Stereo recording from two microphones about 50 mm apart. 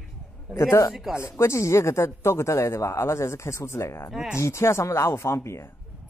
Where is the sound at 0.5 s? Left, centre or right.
Left.